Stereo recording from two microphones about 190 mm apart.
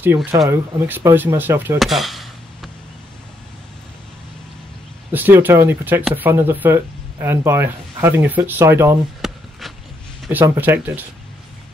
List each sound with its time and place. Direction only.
0.0 s speech: 10° right (ahead or behind)
1.8 s chop: centre (ahead or behind)
5.1 s speech: 10° right (ahead or behind)
9.2 s a sound: centre (ahead or behind)
10.2 s speech: 10° right (ahead or behind)